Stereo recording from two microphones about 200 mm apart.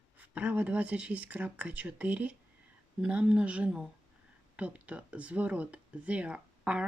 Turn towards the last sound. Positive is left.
turn(degrees=-5)  # may be behind; listen again after turning